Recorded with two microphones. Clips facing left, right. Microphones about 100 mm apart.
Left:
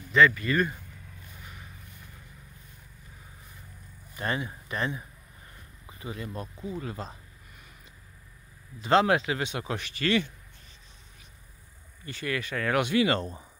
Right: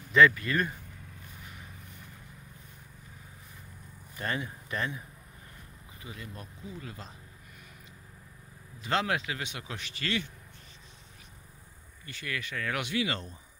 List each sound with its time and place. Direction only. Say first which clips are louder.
0.1 s speech: even; centre (ahead or behind)
4.2 s speech: left 3 dB; 20° left (ahead or behind)
6.0 s speech: left 8 dB; 35° left (ahead or behind)
8.8 s speech: left 8 dB; 35° left (ahead or behind)
9.7 s speech: left 8 dB; 50° left (ahead or behind)
12.1 s speech: left 6 dB; 40° left (ahead or behind); by 13.4 s 55° left (ahead or behind)